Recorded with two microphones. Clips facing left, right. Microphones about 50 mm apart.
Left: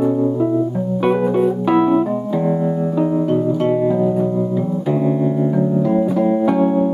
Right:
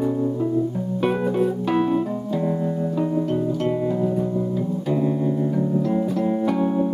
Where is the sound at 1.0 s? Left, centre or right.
Centre.